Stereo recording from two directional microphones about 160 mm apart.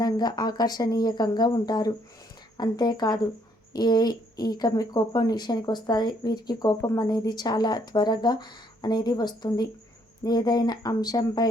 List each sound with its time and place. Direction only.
0.0 s speech: 25° left (ahead or behind)